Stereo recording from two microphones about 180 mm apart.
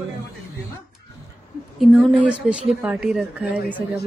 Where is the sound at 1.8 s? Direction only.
Centre (ahead or behind).